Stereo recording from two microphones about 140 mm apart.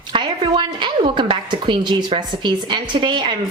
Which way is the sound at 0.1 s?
35° right (ahead or behind).